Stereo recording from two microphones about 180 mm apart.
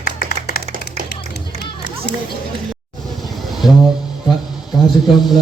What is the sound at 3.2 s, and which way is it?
Vehicle, centre (ahead or behind).